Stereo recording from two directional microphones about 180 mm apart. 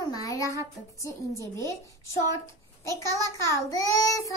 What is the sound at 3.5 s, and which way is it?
Speech, 15° left (ahead or behind).